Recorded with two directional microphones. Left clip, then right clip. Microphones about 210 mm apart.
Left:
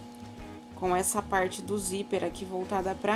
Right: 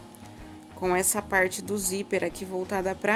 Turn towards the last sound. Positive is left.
turn(degrees=-30)  # may be behind; listen again after turning